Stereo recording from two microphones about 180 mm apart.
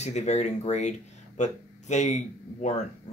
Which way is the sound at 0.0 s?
40° left (ahead or behind).